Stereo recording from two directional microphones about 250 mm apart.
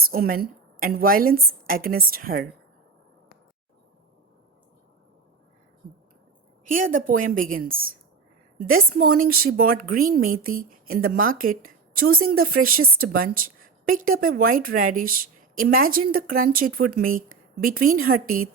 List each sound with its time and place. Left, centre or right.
0.1 s speech: right
6.9 s speech: right